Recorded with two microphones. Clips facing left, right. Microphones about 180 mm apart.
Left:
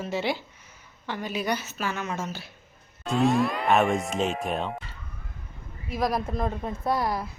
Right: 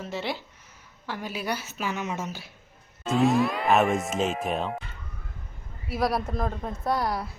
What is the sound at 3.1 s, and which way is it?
Speech, centre (ahead or behind).